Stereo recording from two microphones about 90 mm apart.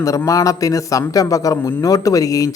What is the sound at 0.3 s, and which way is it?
A man's voice, 40° left (ahead or behind).